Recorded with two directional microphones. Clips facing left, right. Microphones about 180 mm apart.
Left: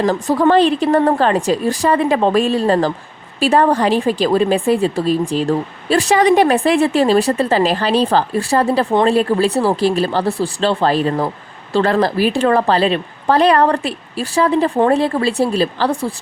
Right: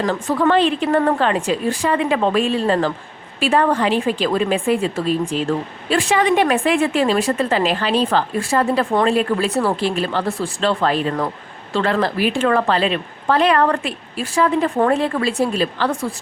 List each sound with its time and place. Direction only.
0.0 s a woman's voice: 40° left (ahead or behind)